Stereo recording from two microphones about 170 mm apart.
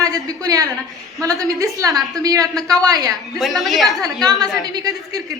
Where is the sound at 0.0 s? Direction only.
20° right (ahead or behind).